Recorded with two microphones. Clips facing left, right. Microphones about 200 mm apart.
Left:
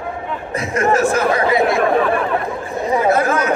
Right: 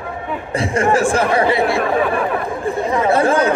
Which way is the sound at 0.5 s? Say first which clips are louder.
Right 1 dB; 30° right (ahead or behind).